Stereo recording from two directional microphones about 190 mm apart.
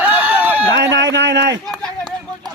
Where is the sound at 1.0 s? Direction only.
65° right (ahead or behind).